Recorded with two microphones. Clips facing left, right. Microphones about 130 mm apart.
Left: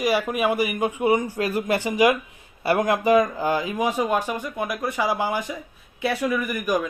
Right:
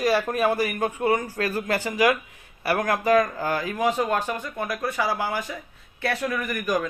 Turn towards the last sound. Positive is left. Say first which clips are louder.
# left 2 dB
turn(degrees=10)  # may be behind; listen again after turning